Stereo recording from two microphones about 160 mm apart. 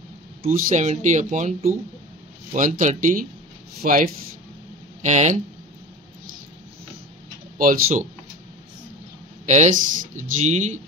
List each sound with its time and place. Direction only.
0.5 s speech: 55° right (ahead or behind)
5.0 s speech: 45° right (ahead or behind)
7.5 s speech: 60° right (ahead or behind)
9.5 s speech: 45° right (ahead or behind)